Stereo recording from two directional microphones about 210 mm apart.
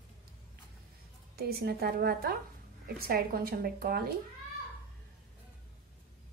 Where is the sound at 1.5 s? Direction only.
50° right (ahead or behind).